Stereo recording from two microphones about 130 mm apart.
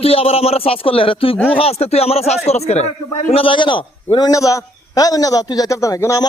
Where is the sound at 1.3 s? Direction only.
10° left (ahead or behind).